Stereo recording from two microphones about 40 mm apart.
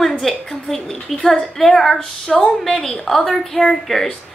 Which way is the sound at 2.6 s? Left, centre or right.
Centre.